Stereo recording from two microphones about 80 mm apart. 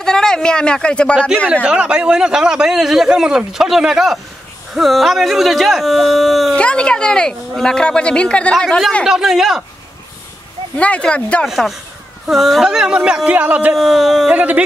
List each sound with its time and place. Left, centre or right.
0.0 s speech: centre
1.5 s a man's voice: centre
6.5 s speech: centre
10.8 s speech: centre
11.4 s a man's voice: centre
13.7 s speech: centre
14.3 s speech: centre